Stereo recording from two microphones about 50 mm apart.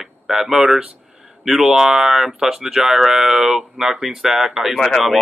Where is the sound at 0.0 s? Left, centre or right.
Centre.